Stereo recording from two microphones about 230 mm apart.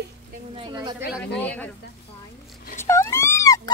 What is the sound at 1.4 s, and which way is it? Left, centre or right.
Speech, centre.